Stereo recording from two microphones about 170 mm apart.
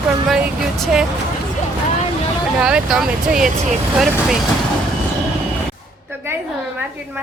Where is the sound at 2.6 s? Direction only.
5° right (ahead or behind).